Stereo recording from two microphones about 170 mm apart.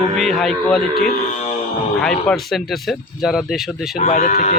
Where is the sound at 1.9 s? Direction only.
5° left (ahead or behind).